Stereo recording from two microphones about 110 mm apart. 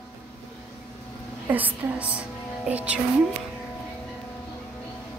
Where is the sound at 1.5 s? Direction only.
15° right (ahead or behind).